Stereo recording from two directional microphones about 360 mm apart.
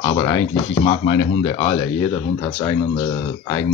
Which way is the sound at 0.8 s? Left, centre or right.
Centre.